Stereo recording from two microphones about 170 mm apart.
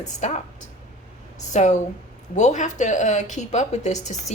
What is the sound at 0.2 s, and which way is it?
Speech, 40° left (ahead or behind).